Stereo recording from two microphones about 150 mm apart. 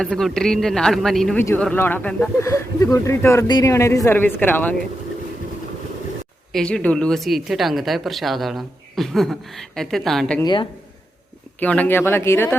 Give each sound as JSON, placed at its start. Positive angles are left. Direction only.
{"t": 0.0, "sound": "speech", "side_deg": 0}
{"t": 1.4, "sound": "speech", "side_deg": 15}
{"t": 2.4, "sound": "speech", "side_deg": 20}
{"t": 6.5, "sound": "speech", "side_deg": 5}
{"t": 10.4, "sound": "speech", "side_deg": 30}
{"t": 11.6, "sound": "speech", "side_deg": 10}